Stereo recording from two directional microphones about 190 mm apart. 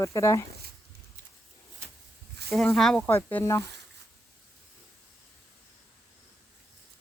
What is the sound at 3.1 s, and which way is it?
Speech, 15° left (ahead or behind).